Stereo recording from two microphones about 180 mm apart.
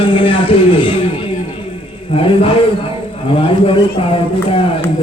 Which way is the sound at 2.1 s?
30° left (ahead or behind).